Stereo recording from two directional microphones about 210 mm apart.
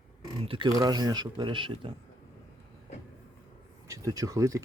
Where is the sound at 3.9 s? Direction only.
15° right (ahead or behind).